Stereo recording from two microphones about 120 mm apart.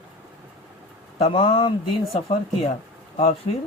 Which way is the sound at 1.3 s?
40° left (ahead or behind).